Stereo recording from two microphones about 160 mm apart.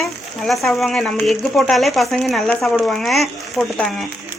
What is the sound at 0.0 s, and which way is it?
Speech, centre (ahead or behind).